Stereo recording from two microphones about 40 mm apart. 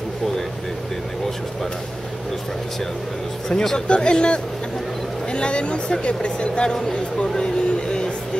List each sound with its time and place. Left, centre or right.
3.4 s speech: centre